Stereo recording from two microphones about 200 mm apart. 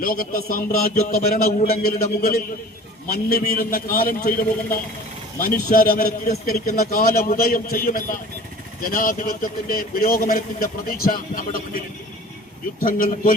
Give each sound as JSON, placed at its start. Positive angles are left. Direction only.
{"t": 0.0, "sound": "a man's voice", "side_deg": 45}
{"t": 12.8, "sound": "a man's voice", "side_deg": 45}